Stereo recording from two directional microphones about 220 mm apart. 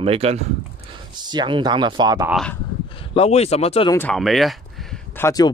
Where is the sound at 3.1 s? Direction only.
30° left (ahead or behind).